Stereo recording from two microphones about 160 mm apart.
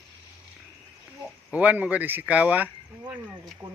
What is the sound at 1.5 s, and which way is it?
Speech, 10° right (ahead or behind).